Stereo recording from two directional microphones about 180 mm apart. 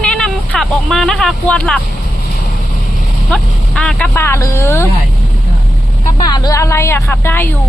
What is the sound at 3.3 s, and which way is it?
Speech, 5° left (ahead or behind).